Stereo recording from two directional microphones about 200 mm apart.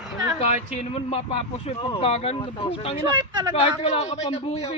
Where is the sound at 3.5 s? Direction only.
30° left (ahead or behind).